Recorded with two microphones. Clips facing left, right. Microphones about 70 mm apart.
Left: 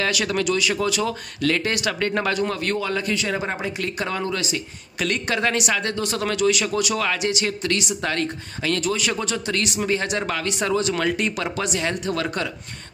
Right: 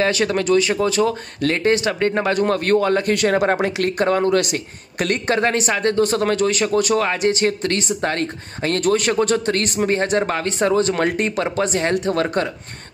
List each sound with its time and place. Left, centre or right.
0.0 s speech: right
2.3 s speech: right